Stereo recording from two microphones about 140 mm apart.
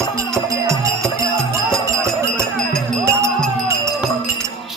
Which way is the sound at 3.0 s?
20° right (ahead or behind).